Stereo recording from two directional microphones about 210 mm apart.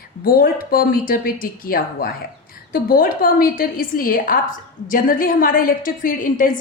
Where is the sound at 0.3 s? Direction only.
45° left (ahead or behind).